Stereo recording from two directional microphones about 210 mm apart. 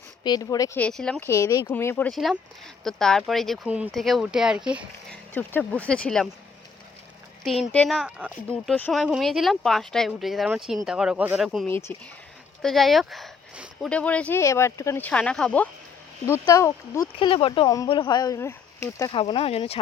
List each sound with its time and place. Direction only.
0.3 s speech: 20° left (ahead or behind)
0.8 s speech: 5° left (ahead or behind)
1.3 s speech: 15° left (ahead or behind); by 5.2 s 5° right (ahead or behind)
5.3 s speech: 10° left (ahead or behind)
7.4 s speech: centre (ahead or behind)
11.7 s speech: 10° left (ahead or behind)
12.6 s speech: centre (ahead or behind)
19.1 s speech: 25° left (ahead or behind)